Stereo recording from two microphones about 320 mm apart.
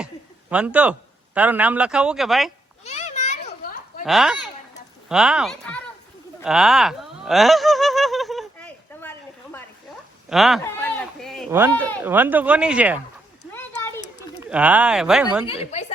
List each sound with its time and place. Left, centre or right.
0.5 s speech: centre
2.8 s children playing: left
4.0 s speech: centre
6.4 s a sound: centre
12.0 s speech: centre
13.5 s a sound: centre
14.5 s speech: centre
15.4 s speech: left